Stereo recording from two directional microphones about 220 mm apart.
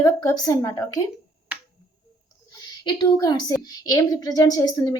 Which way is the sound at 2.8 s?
20° left (ahead or behind).